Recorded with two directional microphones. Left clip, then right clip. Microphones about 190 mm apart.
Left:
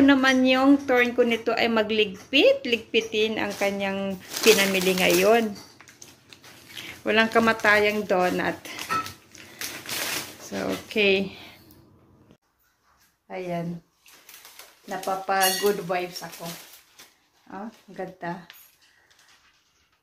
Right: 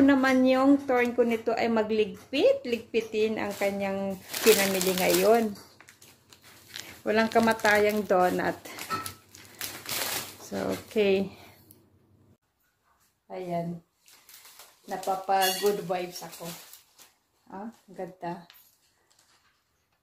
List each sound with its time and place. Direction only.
0.0 s speech: 10° right (ahead or behind)
7.0 s a sound: centre (ahead or behind)
7.3 s speech: 5° right (ahead or behind)
10.5 s speech: 15° right (ahead or behind)
13.3 s speech: 5° left (ahead or behind)
14.9 s speech: 5° left (ahead or behind)
17.5 s speech: 5° left (ahead or behind)